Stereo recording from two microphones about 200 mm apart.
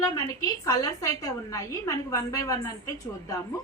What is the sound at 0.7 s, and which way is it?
A woman's voice, 15° left (ahead or behind).